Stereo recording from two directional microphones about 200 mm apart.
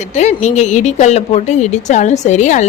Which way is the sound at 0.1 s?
35° left (ahead or behind).